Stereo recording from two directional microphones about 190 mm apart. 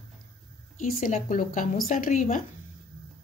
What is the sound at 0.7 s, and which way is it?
Speech, 45° left (ahead or behind).